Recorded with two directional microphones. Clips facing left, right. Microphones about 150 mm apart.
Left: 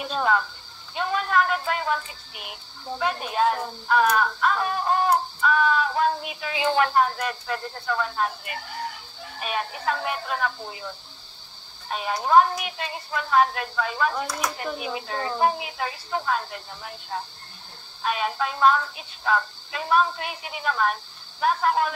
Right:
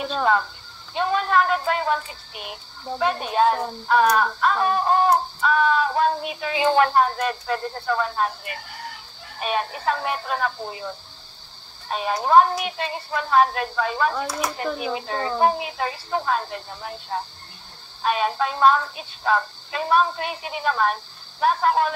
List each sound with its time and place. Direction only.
0.2 s speech: 35° right (ahead or behind)
9.4 s speech: 35° right (ahead or behind)
12.2 s speech: 35° right (ahead or behind)